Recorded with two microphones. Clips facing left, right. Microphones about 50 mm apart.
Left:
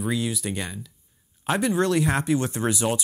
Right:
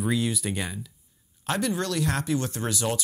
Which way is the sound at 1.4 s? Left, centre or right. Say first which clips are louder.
Left 5 dB; left.